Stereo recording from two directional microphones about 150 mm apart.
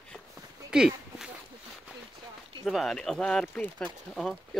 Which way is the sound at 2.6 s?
Centre (ahead or behind).